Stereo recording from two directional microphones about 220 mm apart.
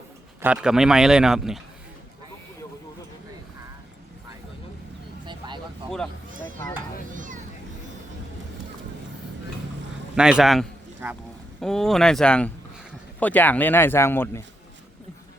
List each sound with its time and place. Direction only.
0.4 s speech: 5° right (ahead or behind)
5.2 s vehicle: 20° right (ahead or behind)
7.1 s a sound: 35° right (ahead or behind)
10.2 s a man's voice: 5° right (ahead or behind)